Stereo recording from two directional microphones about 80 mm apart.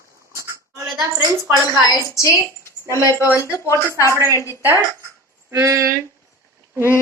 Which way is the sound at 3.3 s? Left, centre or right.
Left.